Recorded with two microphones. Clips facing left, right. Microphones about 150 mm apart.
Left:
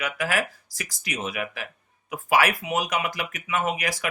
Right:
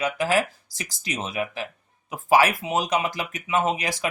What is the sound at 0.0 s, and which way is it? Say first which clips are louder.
Speech: right 4 dB; 25° right (ahead or behind).